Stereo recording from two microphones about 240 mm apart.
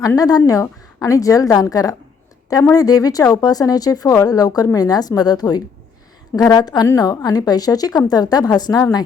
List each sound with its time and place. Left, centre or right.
0.0 s speech: centre